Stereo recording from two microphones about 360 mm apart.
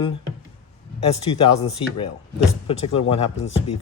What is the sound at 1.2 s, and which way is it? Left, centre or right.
A man's voice, centre.